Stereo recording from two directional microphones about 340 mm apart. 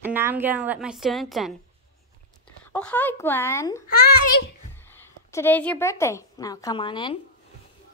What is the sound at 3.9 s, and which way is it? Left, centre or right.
Speech, left.